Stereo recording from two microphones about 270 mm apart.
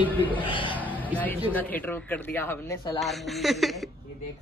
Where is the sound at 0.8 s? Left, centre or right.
Centre.